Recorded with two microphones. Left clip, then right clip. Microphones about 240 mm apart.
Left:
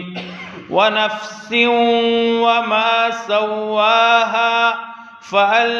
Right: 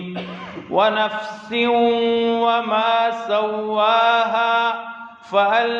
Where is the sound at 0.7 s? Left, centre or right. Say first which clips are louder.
Left 2 dB; left.